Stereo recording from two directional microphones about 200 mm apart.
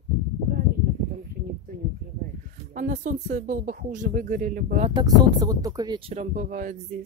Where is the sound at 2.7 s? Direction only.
40° right (ahead or behind).